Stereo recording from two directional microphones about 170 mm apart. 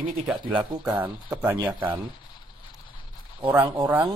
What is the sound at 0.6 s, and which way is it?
Speech, 10° right (ahead or behind).